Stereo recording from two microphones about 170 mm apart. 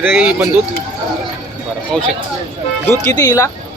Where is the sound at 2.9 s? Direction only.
15° left (ahead or behind).